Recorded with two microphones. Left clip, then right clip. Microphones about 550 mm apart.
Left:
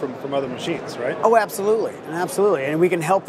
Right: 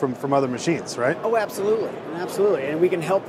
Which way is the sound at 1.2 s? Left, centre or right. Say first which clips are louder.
Left 5 dB; left.